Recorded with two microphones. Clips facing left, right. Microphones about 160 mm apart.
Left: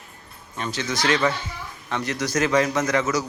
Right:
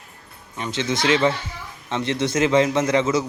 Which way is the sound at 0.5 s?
20° right (ahead or behind).